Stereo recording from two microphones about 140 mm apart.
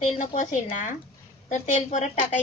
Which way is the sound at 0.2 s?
65° left (ahead or behind).